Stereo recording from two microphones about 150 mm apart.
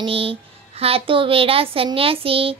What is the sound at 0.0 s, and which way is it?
Speech, 40° right (ahead or behind).